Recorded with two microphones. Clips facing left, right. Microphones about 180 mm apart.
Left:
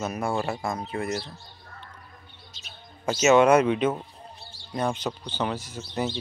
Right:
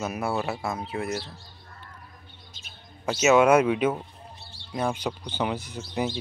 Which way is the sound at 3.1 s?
5° right (ahead or behind).